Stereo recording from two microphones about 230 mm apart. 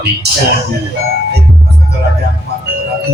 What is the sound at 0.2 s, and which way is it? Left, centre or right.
Speech, right.